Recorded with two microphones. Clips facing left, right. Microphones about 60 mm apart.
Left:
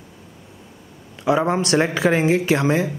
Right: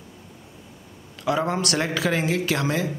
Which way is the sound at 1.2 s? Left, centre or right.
Left.